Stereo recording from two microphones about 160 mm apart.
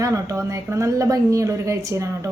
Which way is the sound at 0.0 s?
20° right (ahead or behind).